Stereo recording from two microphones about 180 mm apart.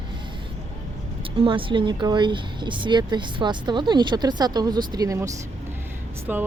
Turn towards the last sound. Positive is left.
turn(degrees=-10)  # may be behind; listen again after turning